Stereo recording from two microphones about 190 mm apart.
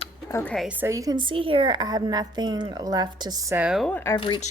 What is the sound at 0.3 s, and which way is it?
Speech, 15° left (ahead or behind).